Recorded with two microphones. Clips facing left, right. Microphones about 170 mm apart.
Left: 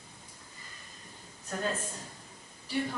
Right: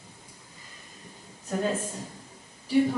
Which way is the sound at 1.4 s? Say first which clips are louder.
Right 6 dB; 15° right (ahead or behind).